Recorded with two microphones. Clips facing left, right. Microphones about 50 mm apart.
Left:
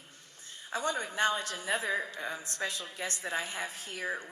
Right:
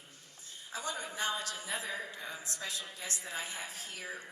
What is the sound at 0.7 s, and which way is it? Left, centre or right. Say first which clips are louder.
A woman's voice: left 6 dB; left.